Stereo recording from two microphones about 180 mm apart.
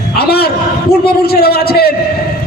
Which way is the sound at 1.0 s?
60° left (ahead or behind).